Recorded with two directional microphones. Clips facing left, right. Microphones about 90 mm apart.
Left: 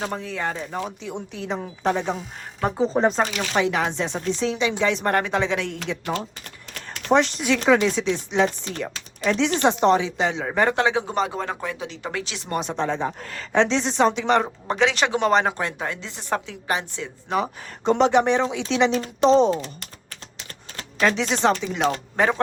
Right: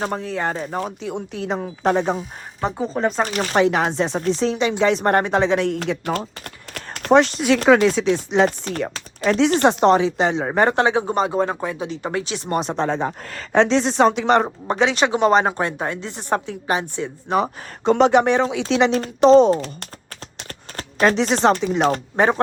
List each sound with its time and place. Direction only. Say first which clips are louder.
0.0 s speech: right 4 dB; 45° right (ahead or behind)
2.9 s speech: even; centre (ahead or behind)
3.2 s speech: right 5 dB; 40° right (ahead or behind)
11.3 s speech: right 6 dB; 20° right (ahead or behind); by 14.4 s 45° right (ahead or behind)
14.4 s speech: right 2 dB; 30° right (ahead or behind)
16.0 s speech: right 6 dB; 45° right (ahead or behind)
16.3 s speech: right 4 dB; 35° right (ahead or behind)
18.1 s speech: right 3 dB; 55° right (ahead or behind)
21.0 s speech: right 4 dB; 40° right (ahead or behind)
22.1 s speech: right 3 dB; 25° right (ahead or behind)